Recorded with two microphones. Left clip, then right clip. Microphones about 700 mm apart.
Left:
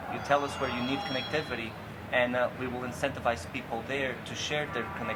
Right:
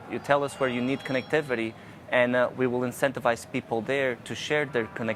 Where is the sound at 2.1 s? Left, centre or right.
Right.